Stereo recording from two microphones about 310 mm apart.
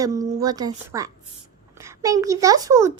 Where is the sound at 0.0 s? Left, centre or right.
Centre.